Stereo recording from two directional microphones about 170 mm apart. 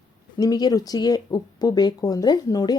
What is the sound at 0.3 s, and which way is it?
A woman's voice, 20° left (ahead or behind).